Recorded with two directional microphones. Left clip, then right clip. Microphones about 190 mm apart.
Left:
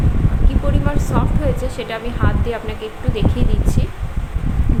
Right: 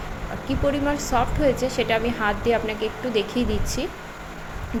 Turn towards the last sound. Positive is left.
turn(degrees=-15)  # may be behind; listen again after turning